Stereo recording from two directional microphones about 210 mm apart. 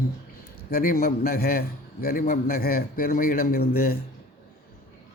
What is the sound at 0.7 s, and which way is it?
A man's voice, 45° left (ahead or behind).